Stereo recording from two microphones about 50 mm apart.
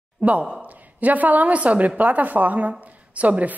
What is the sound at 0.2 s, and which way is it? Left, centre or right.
A woman's voice, right.